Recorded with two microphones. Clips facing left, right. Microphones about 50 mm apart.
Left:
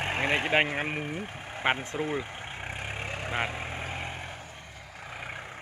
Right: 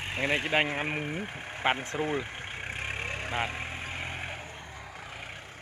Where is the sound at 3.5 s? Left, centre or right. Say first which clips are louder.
Left 1 dB; centre.